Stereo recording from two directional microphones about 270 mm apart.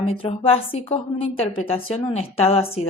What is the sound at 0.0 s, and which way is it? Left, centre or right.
A woman's voice, left.